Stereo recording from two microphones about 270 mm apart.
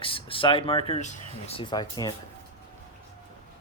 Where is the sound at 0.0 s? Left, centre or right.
Centre.